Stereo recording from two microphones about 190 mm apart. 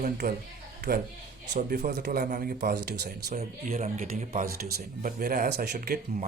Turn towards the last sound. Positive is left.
turn(degrees=-50)  # may be behind; listen again after turning